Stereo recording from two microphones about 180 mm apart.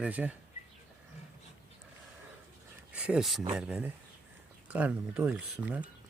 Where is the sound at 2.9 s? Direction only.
5° right (ahead or behind).